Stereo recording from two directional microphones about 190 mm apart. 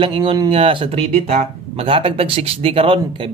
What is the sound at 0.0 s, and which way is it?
Speech, 25° right (ahead or behind).